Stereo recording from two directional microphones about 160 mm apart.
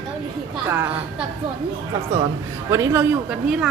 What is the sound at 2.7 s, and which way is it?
Speech, 15° right (ahead or behind).